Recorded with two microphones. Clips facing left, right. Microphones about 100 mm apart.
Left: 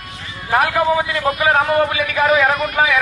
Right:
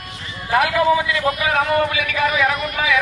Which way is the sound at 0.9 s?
30° left (ahead or behind).